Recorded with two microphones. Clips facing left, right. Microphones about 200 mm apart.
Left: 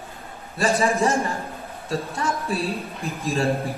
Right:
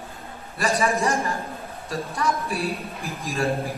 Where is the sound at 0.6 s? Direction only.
30° left (ahead or behind).